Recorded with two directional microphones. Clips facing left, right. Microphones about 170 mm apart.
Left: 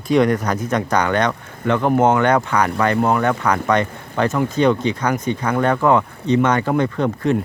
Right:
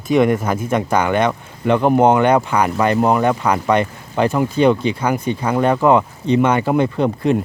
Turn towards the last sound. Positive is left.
turn(degrees=-15)  # may be behind; listen again after turning